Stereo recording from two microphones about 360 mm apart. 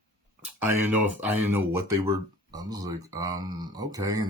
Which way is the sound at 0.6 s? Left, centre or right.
Centre.